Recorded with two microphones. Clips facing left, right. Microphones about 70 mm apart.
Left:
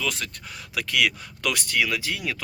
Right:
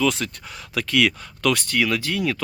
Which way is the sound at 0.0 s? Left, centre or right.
Centre.